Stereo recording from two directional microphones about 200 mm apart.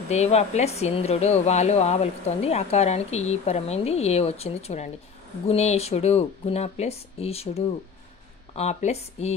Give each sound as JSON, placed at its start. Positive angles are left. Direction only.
{"t": 0.1, "sound": "speech", "side_deg": 35}